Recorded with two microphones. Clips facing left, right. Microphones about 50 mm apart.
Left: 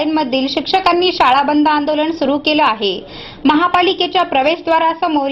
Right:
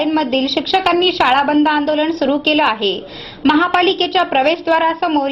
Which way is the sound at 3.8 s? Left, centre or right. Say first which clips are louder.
Even; left.